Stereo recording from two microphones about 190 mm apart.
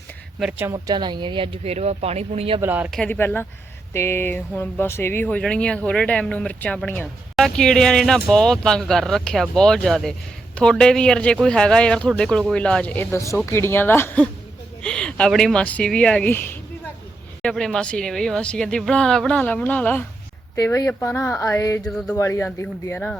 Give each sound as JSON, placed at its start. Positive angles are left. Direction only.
{"t": 0.3, "sound": "speech", "side_deg": -5}
{"t": 2.6, "sound": "speech", "side_deg": -10}
{"t": 3.0, "sound": "speech", "side_deg": 10}
{"t": 21.8, "sound": "speech", "side_deg": 5}
{"t": 22.2, "sound": "speech", "side_deg": 15}